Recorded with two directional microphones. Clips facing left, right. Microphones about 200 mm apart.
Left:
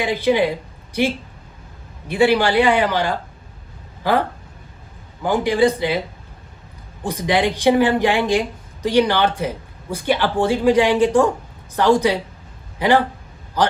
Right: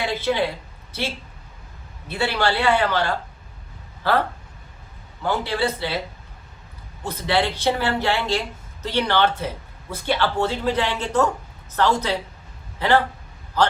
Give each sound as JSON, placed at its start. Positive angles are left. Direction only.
{"t": 0.0, "sound": "speech", "side_deg": 15}
{"t": 2.0, "sound": "speech", "side_deg": 15}
{"t": 5.2, "sound": "speech", "side_deg": 15}
{"t": 7.0, "sound": "speech", "side_deg": 15}